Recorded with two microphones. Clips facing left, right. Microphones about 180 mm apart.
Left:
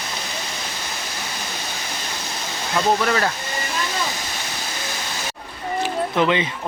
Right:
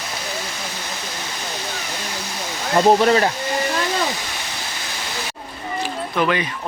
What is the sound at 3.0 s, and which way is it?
Speech, 25° right (ahead or behind).